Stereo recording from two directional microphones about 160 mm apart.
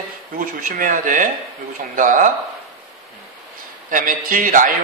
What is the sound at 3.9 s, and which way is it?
Music, 60° right (ahead or behind).